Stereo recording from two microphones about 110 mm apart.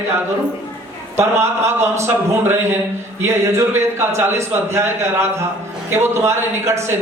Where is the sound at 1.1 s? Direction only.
25° right (ahead or behind).